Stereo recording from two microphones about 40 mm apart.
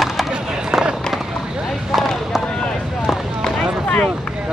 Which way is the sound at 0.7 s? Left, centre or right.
Right.